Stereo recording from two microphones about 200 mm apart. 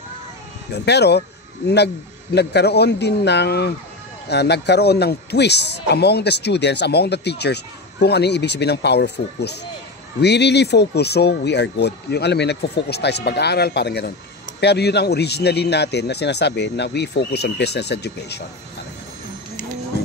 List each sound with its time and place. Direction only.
0.8 s speech: 55° left (ahead or behind)
2.3 s speech: 55° left (ahead or behind)